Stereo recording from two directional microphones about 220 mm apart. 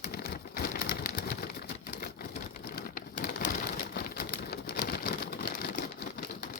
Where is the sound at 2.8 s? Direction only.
40° left (ahead or behind).